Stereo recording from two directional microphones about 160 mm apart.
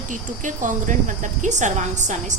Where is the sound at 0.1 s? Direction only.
55° right (ahead or behind).